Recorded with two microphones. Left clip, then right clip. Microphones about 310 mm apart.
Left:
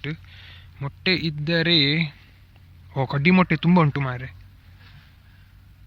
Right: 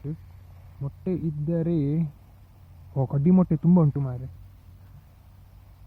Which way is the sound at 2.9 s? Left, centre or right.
Centre.